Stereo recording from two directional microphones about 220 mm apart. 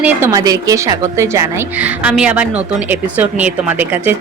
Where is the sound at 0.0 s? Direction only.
10° right (ahead or behind).